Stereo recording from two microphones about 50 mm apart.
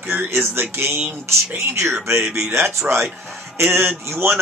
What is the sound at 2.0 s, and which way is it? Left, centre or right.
Speech, right.